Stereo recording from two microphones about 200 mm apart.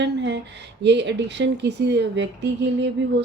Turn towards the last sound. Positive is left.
turn(degrees=-60)  # may be behind; listen again after turning